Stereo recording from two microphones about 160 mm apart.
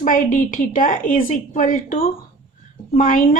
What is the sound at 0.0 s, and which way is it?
A woman's voice, 55° left (ahead or behind).